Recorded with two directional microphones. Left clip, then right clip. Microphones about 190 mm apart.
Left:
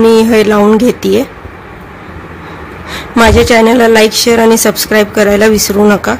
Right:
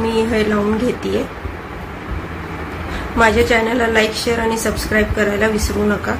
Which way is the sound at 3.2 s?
60° left (ahead or behind).